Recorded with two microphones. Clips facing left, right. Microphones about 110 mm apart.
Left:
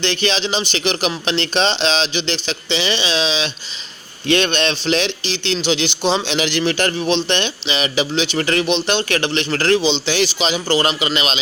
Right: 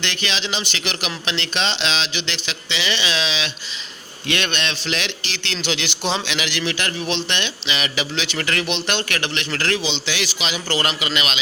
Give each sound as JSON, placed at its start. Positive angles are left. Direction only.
{"t": 0.0, "sound": "a man's voice", "side_deg": 30}